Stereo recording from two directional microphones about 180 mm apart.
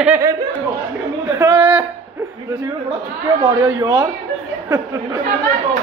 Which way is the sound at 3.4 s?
25° right (ahead or behind).